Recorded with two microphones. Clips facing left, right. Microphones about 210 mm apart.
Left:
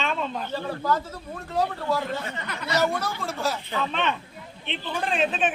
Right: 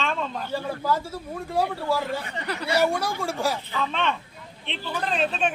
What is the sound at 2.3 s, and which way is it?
Speech, 35° right (ahead or behind).